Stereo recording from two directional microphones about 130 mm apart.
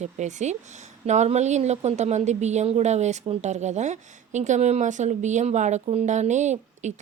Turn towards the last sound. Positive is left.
turn(degrees=-65)  # may be behind; listen again after turning